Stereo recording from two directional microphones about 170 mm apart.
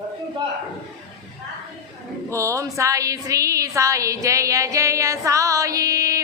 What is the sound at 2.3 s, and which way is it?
A woman's voice, 15° right (ahead or behind).